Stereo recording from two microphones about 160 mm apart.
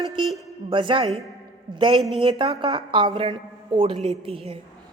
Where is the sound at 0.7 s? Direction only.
30° right (ahead or behind).